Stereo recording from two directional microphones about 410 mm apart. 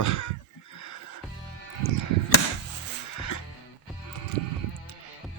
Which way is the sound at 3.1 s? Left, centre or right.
Left.